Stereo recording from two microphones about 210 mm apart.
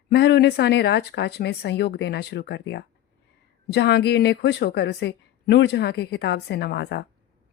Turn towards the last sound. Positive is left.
turn(degrees=50)  # may be behind; listen again after turning